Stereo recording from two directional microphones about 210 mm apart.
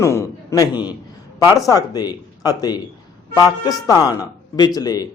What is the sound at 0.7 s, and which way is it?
Speech, 5° right (ahead or behind).